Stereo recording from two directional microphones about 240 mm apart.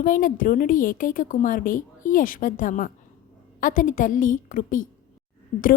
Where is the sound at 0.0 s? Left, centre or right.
Left.